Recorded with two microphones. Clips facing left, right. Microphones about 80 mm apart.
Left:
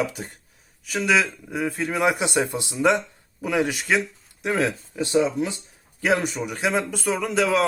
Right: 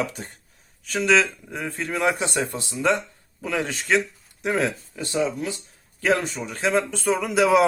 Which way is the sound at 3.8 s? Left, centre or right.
Centre.